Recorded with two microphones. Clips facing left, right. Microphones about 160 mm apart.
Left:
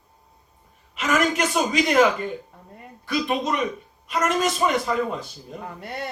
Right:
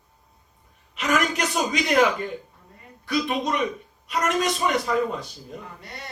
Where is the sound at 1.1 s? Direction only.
45° left (ahead or behind).